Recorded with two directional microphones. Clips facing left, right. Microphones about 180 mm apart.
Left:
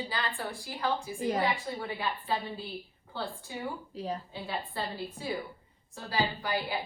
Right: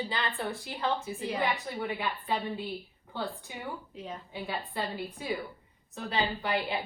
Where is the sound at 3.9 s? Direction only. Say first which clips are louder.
Left 5 dB; 35° left (ahead or behind).